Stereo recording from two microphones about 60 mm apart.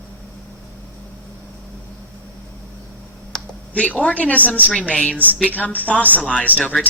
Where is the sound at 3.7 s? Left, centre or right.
Left.